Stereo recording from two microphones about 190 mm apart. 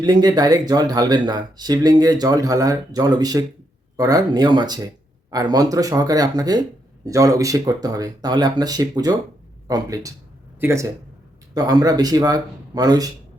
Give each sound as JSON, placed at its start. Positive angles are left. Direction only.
{"t": 0.0, "sound": "speech", "side_deg": -20}